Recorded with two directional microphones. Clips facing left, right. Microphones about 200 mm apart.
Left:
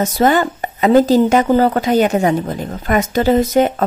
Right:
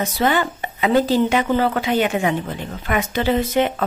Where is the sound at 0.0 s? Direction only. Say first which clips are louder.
Left 5 dB; 45° left (ahead or behind).